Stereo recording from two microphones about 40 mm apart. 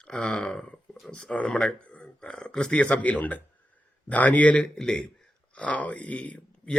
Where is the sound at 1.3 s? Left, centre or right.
Left.